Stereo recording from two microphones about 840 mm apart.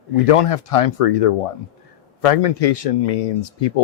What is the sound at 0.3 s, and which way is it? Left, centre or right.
Speech, left.